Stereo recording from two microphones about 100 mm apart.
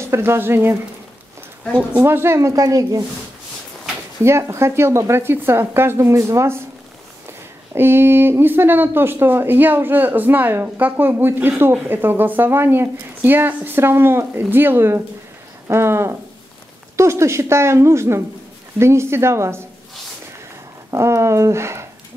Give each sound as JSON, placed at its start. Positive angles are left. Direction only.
{"t": 0.0, "sound": "speech", "side_deg": -25}
{"t": 1.8, "sound": "speech", "side_deg": -10}
{"t": 2.0, "sound": "speech", "side_deg": -25}
{"t": 4.2, "sound": "speech", "side_deg": -25}
{"t": 7.7, "sound": "speech", "side_deg": -20}
{"t": 20.9, "sound": "speech", "side_deg": -30}